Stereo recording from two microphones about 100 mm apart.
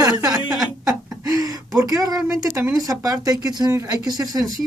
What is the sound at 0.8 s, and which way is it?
Chuckle, 35° right (ahead or behind).